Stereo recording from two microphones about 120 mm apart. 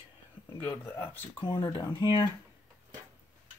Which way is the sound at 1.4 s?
35° left (ahead or behind).